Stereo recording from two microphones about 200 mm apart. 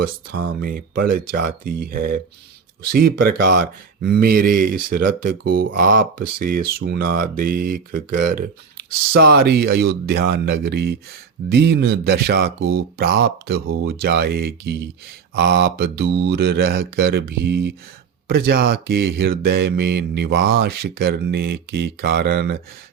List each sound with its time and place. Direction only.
0.6 s speech: 50° right (ahead or behind)